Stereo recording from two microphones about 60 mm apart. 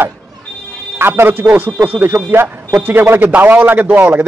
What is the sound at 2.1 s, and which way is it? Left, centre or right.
A man's voice, right.